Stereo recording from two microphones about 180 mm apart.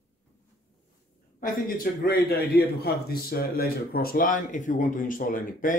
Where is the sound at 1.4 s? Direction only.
55° left (ahead or behind).